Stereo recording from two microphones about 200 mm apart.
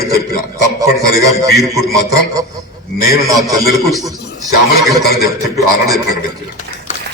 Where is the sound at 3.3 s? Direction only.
15° right (ahead or behind).